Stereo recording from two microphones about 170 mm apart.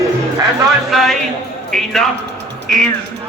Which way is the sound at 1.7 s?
Centre (ahead or behind).